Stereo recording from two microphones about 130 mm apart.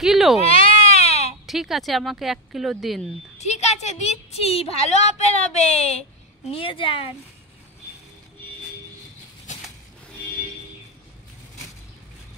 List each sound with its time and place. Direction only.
0.0 s speech: centre (ahead or behind)
0.4 s baby cry: 45° left (ahead or behind)
1.4 s speech: centre (ahead or behind)
3.3 s a woman's voice: 60° left (ahead or behind)
6.5 s speech: 40° left (ahead or behind)